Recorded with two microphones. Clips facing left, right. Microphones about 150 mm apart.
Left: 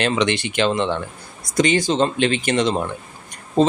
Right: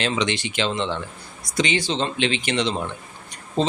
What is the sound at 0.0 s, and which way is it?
Speech, 55° left (ahead or behind).